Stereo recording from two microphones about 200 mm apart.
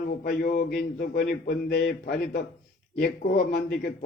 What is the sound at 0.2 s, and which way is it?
A man's voice, 45° left (ahead or behind).